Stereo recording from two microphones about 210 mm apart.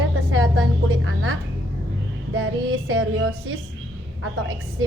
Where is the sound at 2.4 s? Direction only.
80° right.